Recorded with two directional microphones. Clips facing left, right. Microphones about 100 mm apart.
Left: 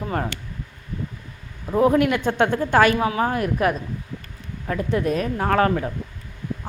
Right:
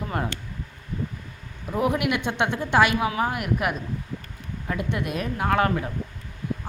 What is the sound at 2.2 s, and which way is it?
A man's voice, 45° left (ahead or behind).